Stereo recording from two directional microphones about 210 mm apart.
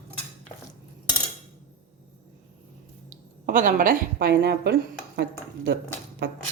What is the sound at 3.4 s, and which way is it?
A woman's voice, 40° right (ahead or behind).